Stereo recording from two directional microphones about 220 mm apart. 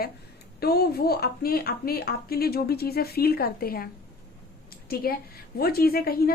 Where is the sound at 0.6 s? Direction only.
45° left (ahead or behind).